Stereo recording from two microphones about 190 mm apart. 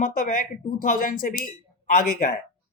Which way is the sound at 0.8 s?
45° left (ahead or behind).